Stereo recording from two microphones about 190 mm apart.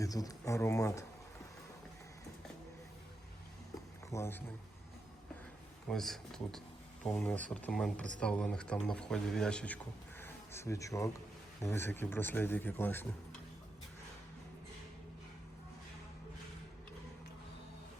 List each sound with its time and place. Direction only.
0.0 s speech: 20° left (ahead or behind)
4.1 s speech: 10° left (ahead or behind)
5.9 s speech: centre (ahead or behind)